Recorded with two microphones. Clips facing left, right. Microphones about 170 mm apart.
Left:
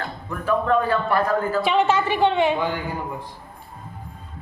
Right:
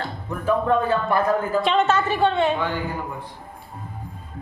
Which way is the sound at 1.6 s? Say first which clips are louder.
Even; 10° left (ahead or behind).